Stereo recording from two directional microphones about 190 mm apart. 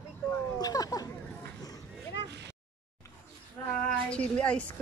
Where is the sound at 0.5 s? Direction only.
20° left (ahead or behind).